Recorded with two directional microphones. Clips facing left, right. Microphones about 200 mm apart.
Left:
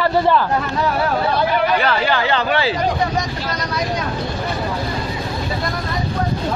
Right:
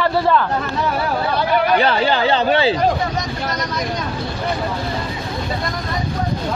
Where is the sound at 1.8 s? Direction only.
30° right (ahead or behind).